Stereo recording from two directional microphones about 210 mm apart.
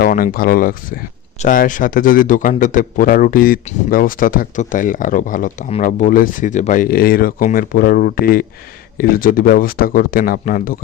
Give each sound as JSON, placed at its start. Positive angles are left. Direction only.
{"t": 0.0, "sound": "a man's voice", "side_deg": 40}